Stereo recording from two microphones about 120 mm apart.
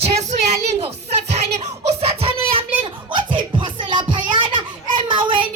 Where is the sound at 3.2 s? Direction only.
40° right (ahead or behind).